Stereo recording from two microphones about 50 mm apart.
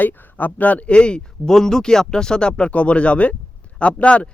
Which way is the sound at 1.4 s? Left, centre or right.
Centre.